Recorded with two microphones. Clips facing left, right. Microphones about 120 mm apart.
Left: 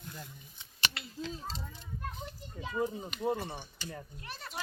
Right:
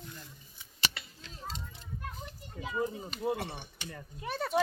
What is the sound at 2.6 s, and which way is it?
Speech, 5° right (ahead or behind).